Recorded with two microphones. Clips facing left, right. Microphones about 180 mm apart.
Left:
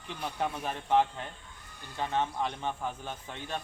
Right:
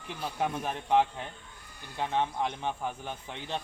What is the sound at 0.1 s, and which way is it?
A man's voice, 10° right (ahead or behind).